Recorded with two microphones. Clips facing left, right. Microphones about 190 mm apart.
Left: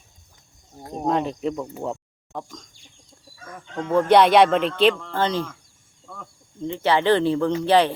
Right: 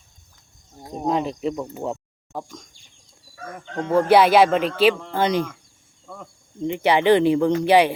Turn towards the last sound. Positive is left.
turn(degrees=-10)  # may be behind; listen again after turning